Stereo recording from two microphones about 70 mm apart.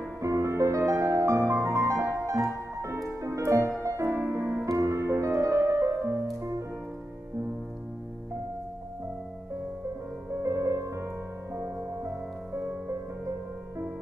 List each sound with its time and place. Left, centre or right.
0.2 s music: right
10.4 s music: right
11.5 s music: right